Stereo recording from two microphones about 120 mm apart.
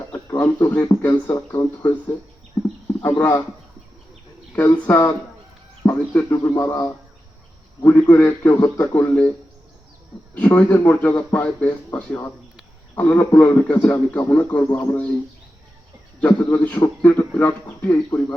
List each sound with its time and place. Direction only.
0.1 s a sound: 20° left (ahead or behind)
1.3 s speech: 25° left (ahead or behind)
4.9 s speech: 20° left (ahead or behind)
7.9 s a man's voice: 15° left (ahead or behind)
10.3 s a man's voice: 10° left (ahead or behind)
16.2 s a man's voice: 10° left (ahead or behind)